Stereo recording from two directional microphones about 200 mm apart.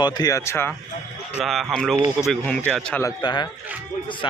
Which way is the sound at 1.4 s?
Centre (ahead or behind).